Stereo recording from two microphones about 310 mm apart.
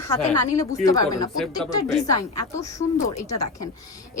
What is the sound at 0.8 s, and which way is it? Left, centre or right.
Speech, centre.